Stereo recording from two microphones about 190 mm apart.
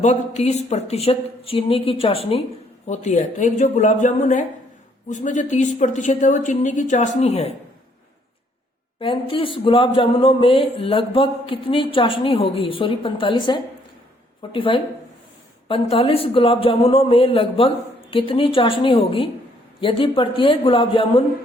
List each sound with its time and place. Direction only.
0.0 s a woman's voice: 35° left (ahead or behind)
9.0 s speech: 25° left (ahead or behind)